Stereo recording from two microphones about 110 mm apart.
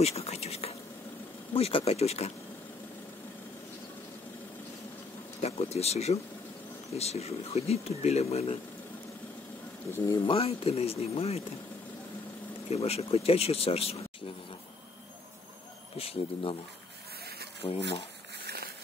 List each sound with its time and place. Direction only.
0.0 s a sound: 70° left (ahead or behind)
1.5 s speech: 55° left (ahead or behind); by 2.3 s 75° left (ahead or behind)
5.4 s speech: 70° left (ahead or behind)
9.9 s speech: 30° left (ahead or behind)
10.2 s speech: 65° left (ahead or behind)
12.6 s speech: 70° left (ahead or behind)
16.0 s speech: 60° left (ahead or behind)
17.6 s speech: 45° left (ahead or behind)